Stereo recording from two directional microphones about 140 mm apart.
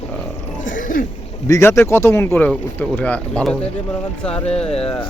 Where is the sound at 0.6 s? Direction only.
70° left (ahead or behind).